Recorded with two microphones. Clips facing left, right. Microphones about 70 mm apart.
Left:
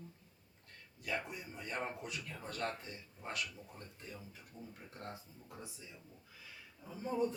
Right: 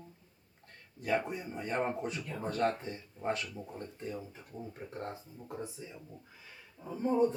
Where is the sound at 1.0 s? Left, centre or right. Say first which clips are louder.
Right 9 dB; right.